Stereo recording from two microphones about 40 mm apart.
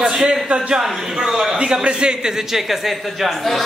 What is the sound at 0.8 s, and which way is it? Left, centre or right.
A man's voice, centre.